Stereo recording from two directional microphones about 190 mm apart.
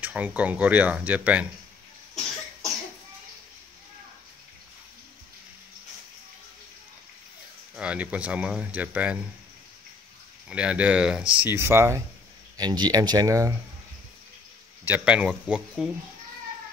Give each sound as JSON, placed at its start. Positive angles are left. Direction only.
{"t": 0.0, "sound": "speech", "side_deg": -10}
{"t": 7.7, "sound": "speech", "side_deg": -5}
{"t": 10.5, "sound": "speech", "side_deg": -5}
{"t": 14.9, "sound": "speech", "side_deg": -5}